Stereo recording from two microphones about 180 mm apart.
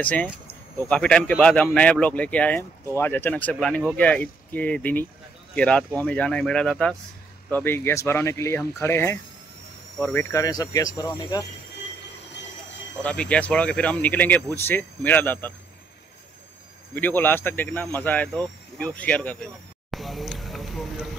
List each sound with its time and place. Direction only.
0.0 s speech: 5° left (ahead or behind)
10.3 s speech: 20° left (ahead or behind)
13.0 s speech: 5° left (ahead or behind)
16.9 s speech: 10° left (ahead or behind)
19.9 s a sound: centre (ahead or behind)